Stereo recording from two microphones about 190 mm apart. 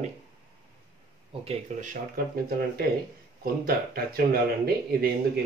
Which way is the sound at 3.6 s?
50° right (ahead or behind).